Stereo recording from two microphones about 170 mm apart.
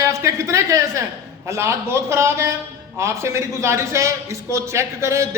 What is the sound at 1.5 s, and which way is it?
A man's voice, 15° right (ahead or behind).